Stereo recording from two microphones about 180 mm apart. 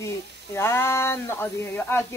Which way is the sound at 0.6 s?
15° left (ahead or behind).